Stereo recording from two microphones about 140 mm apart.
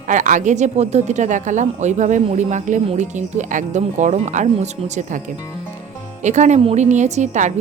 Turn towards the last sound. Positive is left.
turn(degrees=-60)  # may be behind; listen again after turning